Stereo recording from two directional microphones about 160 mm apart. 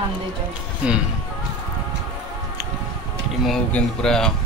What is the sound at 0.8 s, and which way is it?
Speech, 5° right (ahead or behind).